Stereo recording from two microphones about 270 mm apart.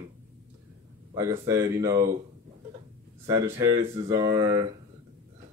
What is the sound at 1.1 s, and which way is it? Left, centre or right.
Speech, centre.